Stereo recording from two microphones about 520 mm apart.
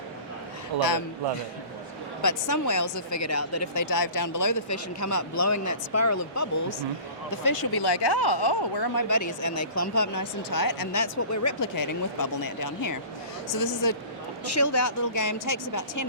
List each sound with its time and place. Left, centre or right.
0.7 s a man's voice: right
2.2 s a woman's voice: left
14.5 s a woman's voice: left